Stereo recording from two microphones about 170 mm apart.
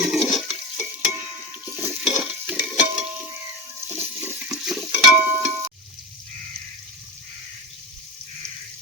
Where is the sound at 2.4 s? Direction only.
10° right (ahead or behind).